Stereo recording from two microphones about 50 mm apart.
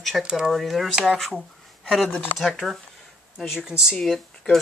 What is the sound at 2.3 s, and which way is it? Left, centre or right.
Speech, centre.